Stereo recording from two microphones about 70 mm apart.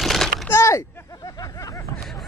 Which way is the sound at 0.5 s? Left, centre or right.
Left.